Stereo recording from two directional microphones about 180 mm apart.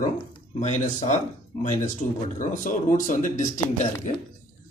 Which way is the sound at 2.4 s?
45° left (ahead or behind).